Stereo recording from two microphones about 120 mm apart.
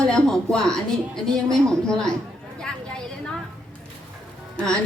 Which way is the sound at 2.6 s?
5° left (ahead or behind).